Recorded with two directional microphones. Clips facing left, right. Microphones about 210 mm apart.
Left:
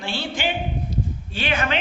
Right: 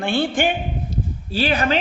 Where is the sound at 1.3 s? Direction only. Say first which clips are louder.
Right 6 dB; 35° right (ahead or behind).